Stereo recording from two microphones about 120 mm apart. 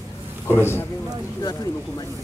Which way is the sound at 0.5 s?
20° left (ahead or behind).